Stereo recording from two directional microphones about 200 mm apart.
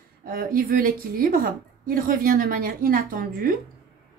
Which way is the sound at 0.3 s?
45° right (ahead or behind).